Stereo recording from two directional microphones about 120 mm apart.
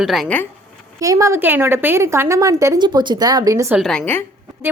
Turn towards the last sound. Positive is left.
turn(degrees=5)  # may be behind; listen again after turning